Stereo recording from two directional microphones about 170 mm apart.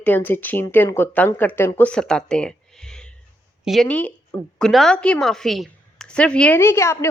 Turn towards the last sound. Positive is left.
turn(degrees=15)  # may be behind; listen again after turning